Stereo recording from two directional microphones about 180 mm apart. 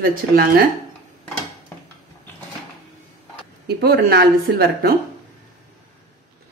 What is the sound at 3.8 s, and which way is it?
Speech, 60° right (ahead or behind).